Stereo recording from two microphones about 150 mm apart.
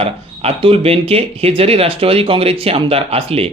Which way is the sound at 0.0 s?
40° right (ahead or behind).